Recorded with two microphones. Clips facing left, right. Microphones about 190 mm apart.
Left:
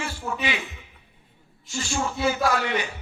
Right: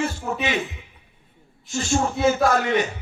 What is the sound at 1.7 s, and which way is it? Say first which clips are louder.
A man's voice: right 5 dB; 40° right (ahead or behind).